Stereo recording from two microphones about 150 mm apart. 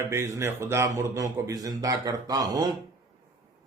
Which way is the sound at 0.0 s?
15° right (ahead or behind).